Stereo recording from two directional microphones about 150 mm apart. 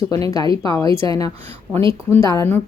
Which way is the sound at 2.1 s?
20° left (ahead or behind).